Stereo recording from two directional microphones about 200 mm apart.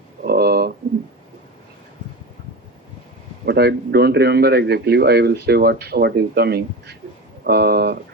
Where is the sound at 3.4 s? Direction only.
55° right (ahead or behind).